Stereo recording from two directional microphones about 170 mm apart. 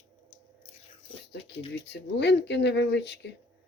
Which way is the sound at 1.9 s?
90° left.